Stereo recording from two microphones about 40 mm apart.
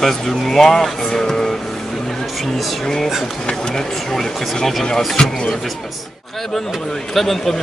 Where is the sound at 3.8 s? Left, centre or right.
Centre.